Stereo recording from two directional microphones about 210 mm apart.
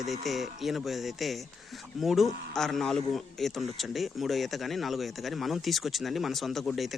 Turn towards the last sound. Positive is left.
turn(degrees=0)  # may be behind; listen again after turning